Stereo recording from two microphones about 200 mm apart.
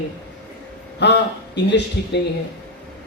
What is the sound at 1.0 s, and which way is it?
A man's voice, 60° left (ahead or behind).